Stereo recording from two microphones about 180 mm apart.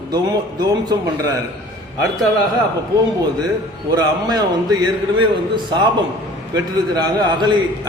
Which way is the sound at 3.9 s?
20° right (ahead or behind).